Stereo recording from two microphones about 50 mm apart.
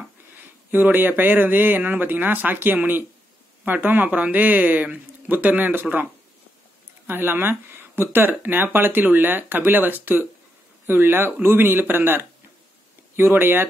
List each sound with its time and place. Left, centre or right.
0.7 s speech: right
7.1 s speech: right